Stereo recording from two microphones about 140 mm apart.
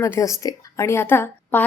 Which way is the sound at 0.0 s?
20° left (ahead or behind).